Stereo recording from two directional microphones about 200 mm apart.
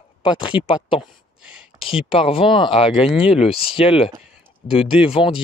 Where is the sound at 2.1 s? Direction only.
30° left (ahead or behind).